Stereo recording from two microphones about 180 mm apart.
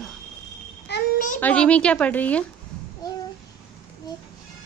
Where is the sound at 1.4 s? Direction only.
10° left (ahead or behind).